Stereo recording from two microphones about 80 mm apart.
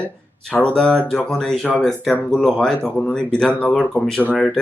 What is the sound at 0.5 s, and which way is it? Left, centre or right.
Speech, centre.